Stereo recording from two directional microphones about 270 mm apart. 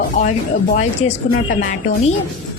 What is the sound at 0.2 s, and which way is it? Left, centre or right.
Speech, left.